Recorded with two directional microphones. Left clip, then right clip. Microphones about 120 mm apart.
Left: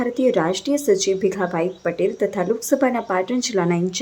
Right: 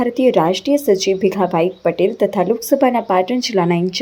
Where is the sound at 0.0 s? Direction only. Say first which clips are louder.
Right 5 dB; 10° right (ahead or behind).